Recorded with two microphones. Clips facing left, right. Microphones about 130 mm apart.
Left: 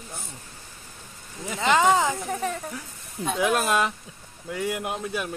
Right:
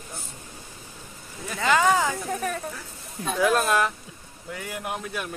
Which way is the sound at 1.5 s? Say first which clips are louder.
Left 1 dB; 20° left (ahead or behind).